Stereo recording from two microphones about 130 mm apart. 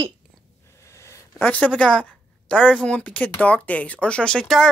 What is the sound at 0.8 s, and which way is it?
A woman's voice, 25° left (ahead or behind).